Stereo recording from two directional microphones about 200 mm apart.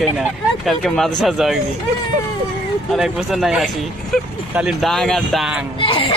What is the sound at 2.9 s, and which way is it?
Speech, centre (ahead or behind).